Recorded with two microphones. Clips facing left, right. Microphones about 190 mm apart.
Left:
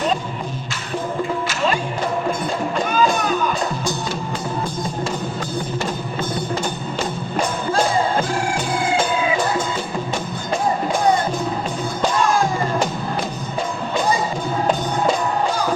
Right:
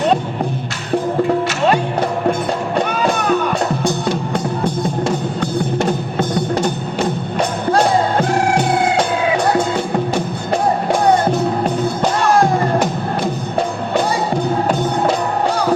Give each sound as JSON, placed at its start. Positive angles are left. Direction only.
{"t": 1.5, "sound": "music", "side_deg": -65}
{"t": 11.1, "sound": "music", "side_deg": -65}
{"t": 15.0, "sound": "music", "side_deg": -65}